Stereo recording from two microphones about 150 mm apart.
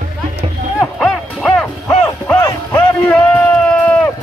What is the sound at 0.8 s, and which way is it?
Music, centre (ahead or behind).